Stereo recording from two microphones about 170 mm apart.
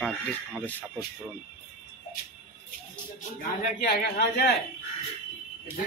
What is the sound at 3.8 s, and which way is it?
Speech, 65° left (ahead or behind).